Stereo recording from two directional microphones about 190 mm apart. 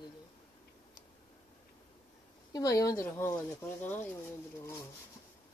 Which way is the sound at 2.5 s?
20° left (ahead or behind).